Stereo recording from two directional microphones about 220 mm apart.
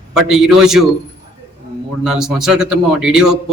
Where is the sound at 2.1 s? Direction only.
Centre (ahead or behind).